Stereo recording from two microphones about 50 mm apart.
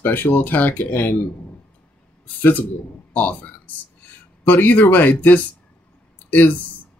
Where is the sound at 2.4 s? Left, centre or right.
Left.